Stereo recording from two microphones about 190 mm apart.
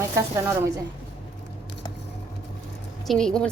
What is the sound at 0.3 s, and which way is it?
Speech, 15° right (ahead or behind).